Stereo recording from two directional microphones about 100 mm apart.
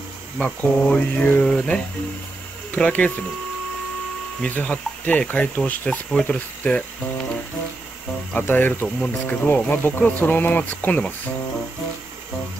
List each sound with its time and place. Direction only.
0.4 s speech: 15° left (ahead or behind)
4.4 s speech: 15° left (ahead or behind)
8.4 s speech: 20° left (ahead or behind)